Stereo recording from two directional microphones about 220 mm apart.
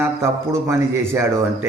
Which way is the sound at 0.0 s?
10° right (ahead or behind).